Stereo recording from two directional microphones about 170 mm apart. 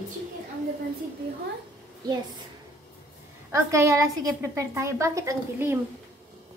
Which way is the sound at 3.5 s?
15° right (ahead or behind).